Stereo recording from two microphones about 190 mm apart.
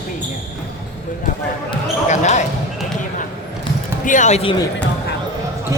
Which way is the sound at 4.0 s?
40° left (ahead or behind).